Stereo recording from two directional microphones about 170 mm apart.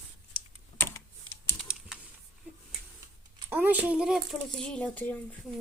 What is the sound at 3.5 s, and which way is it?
Speech, 10° right (ahead or behind).